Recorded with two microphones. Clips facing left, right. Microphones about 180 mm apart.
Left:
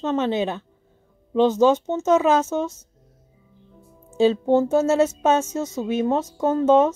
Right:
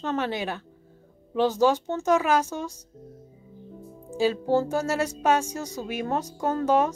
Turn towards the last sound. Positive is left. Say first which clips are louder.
# left 6 dB
turn(degrees=25)  # may be behind; listen again after turning